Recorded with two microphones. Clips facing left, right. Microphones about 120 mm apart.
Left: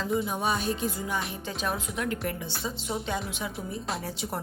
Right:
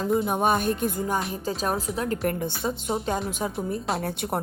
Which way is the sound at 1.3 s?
40° right (ahead or behind).